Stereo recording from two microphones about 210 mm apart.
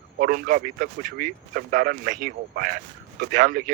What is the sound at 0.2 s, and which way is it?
Speech, 45° right (ahead or behind).